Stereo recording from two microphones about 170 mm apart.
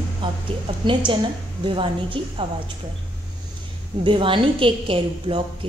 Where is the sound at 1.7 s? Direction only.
30° right (ahead or behind).